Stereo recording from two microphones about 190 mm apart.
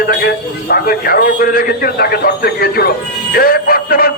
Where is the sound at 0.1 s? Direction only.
55° left (ahead or behind).